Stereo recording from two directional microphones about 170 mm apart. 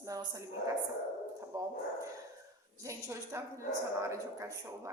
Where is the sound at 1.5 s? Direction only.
20° right (ahead or behind).